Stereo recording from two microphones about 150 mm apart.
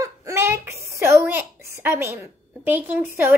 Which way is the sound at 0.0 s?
20° right (ahead or behind).